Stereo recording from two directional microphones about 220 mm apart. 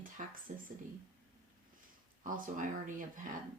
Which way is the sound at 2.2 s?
35° right (ahead or behind).